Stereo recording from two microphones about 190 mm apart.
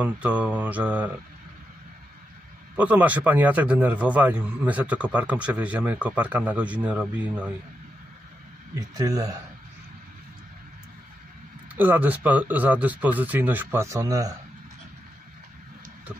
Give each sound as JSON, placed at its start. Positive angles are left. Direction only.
{"t": 0.0, "sound": "a man's voice", "side_deg": -5}
{"t": 2.7, "sound": "a man's voice", "side_deg": -10}
{"t": 8.7, "sound": "speech", "side_deg": -20}
{"t": 11.7, "sound": "a man's voice", "side_deg": -10}